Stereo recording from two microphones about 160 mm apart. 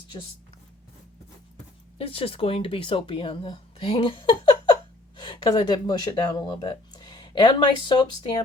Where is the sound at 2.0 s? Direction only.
35° left (ahead or behind).